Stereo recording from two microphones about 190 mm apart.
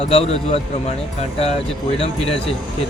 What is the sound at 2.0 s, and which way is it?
Speech, 30° left (ahead or behind).